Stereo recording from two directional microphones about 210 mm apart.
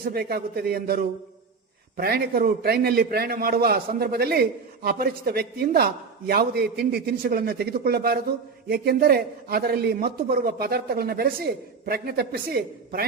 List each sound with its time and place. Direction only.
0.0 s a man's voice: 50° right (ahead or behind)